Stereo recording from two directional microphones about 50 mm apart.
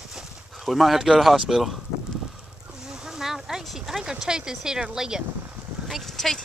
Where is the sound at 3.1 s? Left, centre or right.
Centre.